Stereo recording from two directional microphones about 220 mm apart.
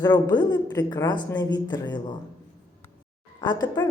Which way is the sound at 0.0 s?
20° left (ahead or behind).